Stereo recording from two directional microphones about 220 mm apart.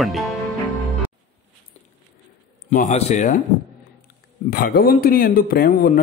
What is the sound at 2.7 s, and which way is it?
Speech, 35° left (ahead or behind).